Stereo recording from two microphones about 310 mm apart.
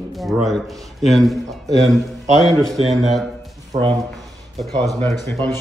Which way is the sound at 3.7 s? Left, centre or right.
Right.